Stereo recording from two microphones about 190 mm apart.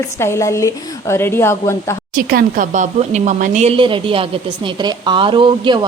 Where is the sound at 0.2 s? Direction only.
15° left (ahead or behind).